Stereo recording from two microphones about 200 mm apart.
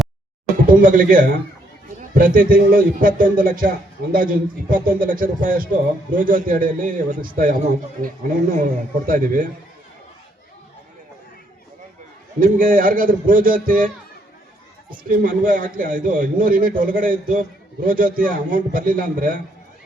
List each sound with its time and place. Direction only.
0.7 s a man's voice: 45° right (ahead or behind)
12.4 s a man's voice: 45° right (ahead or behind)
15.1 s a man's voice: 45° right (ahead or behind)